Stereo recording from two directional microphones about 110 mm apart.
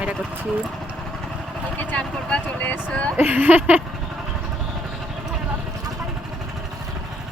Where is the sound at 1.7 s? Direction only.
15° left (ahead or behind).